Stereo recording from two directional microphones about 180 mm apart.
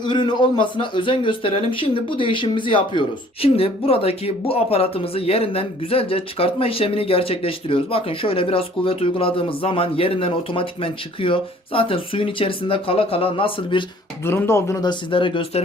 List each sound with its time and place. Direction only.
0.0 s speech: 25° left (ahead or behind)
14.3 s speech: 15° left (ahead or behind); by 15.6 s 30° left (ahead or behind)